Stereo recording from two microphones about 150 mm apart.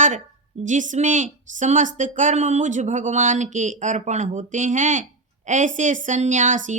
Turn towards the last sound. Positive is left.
turn(degrees=-55)  # may be behind; listen again after turning